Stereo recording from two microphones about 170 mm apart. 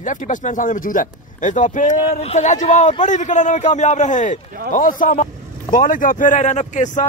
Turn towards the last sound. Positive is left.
turn(degrees=45)  # may be behind; listen again after turning